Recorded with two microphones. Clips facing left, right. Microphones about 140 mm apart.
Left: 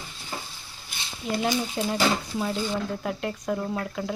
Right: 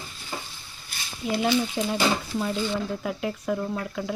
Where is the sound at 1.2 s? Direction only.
5° right (ahead or behind).